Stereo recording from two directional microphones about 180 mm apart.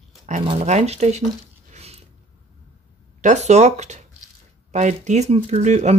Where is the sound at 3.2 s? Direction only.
40° right (ahead or behind).